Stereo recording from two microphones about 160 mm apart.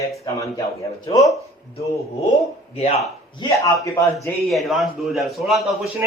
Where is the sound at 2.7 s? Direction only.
45° left (ahead or behind).